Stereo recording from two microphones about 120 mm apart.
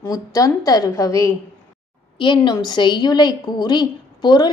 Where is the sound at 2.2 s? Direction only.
40° left (ahead or behind).